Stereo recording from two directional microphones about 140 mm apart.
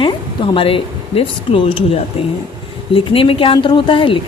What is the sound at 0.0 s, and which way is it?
Speech, 40° left (ahead or behind).